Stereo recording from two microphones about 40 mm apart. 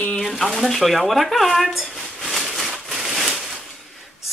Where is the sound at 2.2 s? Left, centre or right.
Centre.